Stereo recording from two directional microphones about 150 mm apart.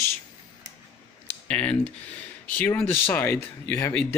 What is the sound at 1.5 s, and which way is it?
Speech, 10° left (ahead or behind).